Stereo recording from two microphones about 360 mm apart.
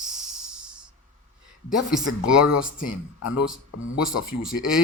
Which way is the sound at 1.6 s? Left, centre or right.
Centre.